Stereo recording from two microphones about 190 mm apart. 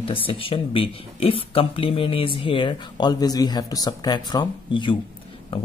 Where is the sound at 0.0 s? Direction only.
30° left (ahead or behind).